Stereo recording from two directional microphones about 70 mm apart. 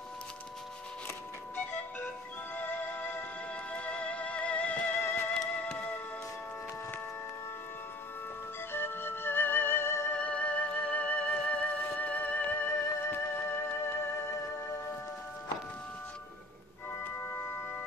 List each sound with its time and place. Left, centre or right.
2.5 s music: left
8.7 s music: left
10.1 s music: centre